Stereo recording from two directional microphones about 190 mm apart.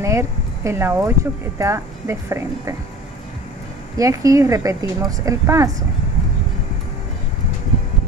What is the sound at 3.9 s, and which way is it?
Speech, 15° right (ahead or behind).